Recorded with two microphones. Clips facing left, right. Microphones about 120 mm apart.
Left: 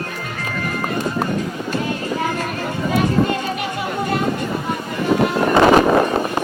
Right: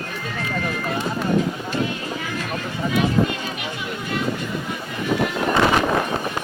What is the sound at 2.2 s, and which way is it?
Music, 45° left (ahead or behind).